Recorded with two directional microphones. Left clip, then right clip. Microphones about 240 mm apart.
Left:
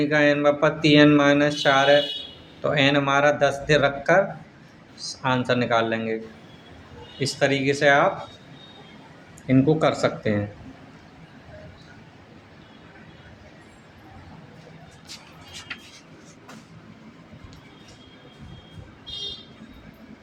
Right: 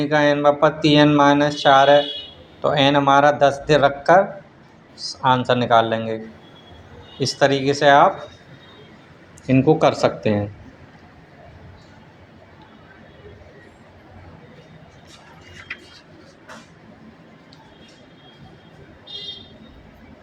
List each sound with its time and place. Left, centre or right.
0.0 s speech: centre
7.2 s speech: centre
9.5 s speech: centre